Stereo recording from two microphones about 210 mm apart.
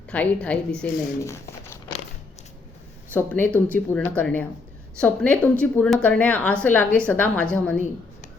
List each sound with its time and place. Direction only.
0.1 s speech: 5° left (ahead or behind)
3.1 s speech: 10° left (ahead or behind)